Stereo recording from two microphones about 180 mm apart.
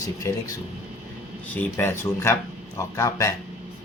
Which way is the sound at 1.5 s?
10° left (ahead or behind).